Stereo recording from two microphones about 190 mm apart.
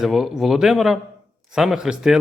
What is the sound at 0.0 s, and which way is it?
A man's voice, centre (ahead or behind).